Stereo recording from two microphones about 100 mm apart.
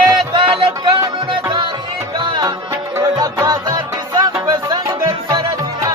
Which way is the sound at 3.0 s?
35° right (ahead or behind).